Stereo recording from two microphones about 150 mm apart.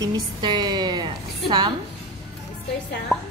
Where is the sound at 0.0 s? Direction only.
30° right (ahead or behind).